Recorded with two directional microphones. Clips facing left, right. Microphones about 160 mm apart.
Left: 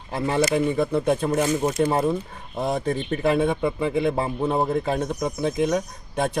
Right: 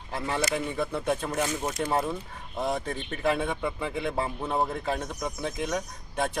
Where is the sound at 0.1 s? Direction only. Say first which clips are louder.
Left 7 dB; 20° left (ahead or behind).